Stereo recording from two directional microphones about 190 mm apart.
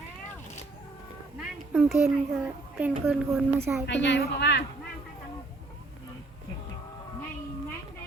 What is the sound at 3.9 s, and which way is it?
Speech, 70° left (ahead or behind).